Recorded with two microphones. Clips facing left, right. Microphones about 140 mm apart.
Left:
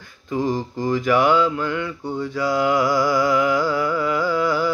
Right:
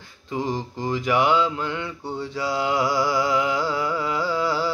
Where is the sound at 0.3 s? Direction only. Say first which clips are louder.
Left 4 dB; 20° right (ahead or behind).